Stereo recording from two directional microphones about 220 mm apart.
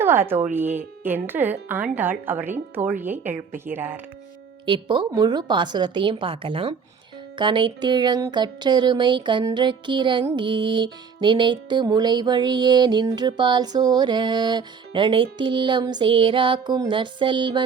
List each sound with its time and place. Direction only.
0.0 s speech: 10° right (ahead or behind)
4.6 s music: 20° right (ahead or behind)